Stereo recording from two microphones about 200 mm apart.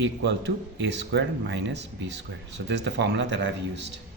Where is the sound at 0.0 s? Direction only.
60° right (ahead or behind).